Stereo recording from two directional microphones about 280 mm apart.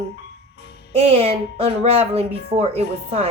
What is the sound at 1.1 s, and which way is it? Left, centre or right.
Speech, right.